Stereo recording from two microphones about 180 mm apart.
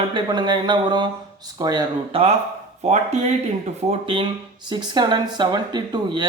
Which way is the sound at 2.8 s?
40° right (ahead or behind).